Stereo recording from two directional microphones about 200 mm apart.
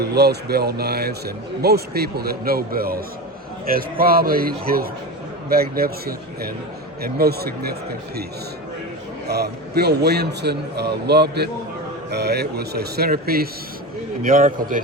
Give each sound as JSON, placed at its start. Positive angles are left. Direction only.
{"t": 0.0, "sound": "speech", "side_deg": -55}
{"t": 9.2, "sound": "a man's voice", "side_deg": -55}